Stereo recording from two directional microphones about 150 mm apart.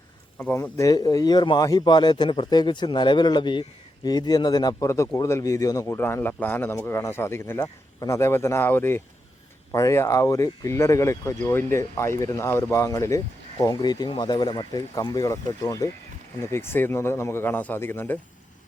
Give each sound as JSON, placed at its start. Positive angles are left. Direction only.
{"t": 0.3, "sound": "speech", "side_deg": 15}